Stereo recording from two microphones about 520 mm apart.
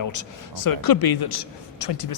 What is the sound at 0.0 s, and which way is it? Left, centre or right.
Speech, left.